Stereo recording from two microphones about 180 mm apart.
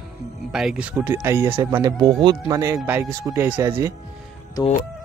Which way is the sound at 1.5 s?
25° right (ahead or behind).